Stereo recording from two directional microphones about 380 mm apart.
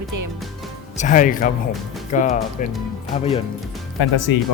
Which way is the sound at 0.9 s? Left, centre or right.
Centre.